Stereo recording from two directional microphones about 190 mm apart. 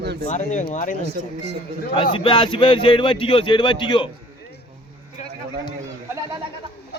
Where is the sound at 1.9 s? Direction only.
25° left (ahead or behind).